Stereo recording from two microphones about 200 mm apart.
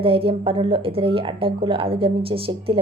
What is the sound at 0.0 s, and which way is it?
A woman's voice, 25° right (ahead or behind).